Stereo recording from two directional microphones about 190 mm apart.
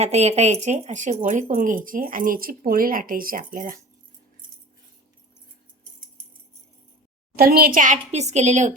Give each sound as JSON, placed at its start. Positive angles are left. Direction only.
{"t": 0.0, "sound": "speech", "side_deg": -35}
{"t": 7.3, "sound": "a woman's voice", "side_deg": -50}